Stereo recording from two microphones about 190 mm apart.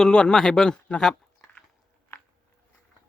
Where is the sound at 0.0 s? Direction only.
5° left (ahead or behind).